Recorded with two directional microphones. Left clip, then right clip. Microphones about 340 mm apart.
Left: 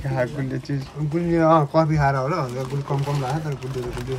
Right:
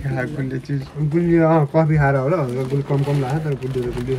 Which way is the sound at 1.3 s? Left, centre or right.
Left.